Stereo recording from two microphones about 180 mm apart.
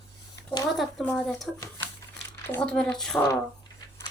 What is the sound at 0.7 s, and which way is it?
Speech, 5° left (ahead or behind).